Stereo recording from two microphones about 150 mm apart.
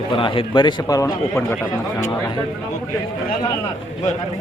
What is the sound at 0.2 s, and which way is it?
Speech, 35° left (ahead or behind).